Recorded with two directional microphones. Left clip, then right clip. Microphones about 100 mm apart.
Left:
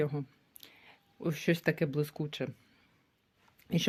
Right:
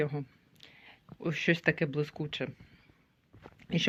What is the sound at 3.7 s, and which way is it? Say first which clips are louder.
Speech: right 3 dB; 30° left (ahead or behind).